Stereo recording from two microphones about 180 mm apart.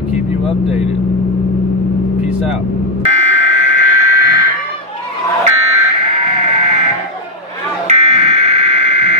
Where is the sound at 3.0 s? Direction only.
40° right (ahead or behind).